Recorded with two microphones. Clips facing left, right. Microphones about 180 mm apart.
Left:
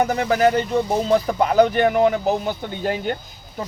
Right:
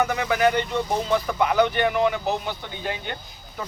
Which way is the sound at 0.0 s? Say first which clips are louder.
Left 4 dB; 35° left (ahead or behind).